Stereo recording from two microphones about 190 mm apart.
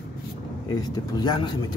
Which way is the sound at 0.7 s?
20° left (ahead or behind).